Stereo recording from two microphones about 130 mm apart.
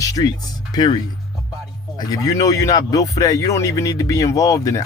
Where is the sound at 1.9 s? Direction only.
30° left (ahead or behind).